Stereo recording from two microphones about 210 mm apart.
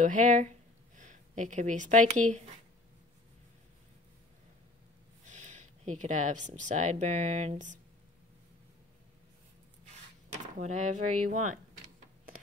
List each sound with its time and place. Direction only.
0.0 s speech: 35° right (ahead or behind)
5.2 s a sound: 35° right (ahead or behind)
6.6 s speech: 35° right (ahead or behind)
10.4 s speech: 35° right (ahead or behind)